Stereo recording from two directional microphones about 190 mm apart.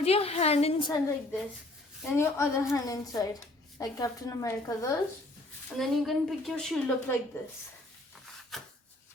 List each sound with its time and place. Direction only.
0.0 s a woman's voice: 30° left (ahead or behind)
2.0 s speech: 15° left (ahead or behind)
5.6 s a woman's voice: centre (ahead or behind)